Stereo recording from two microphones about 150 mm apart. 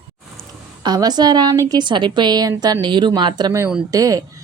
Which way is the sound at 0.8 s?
25° right (ahead or behind).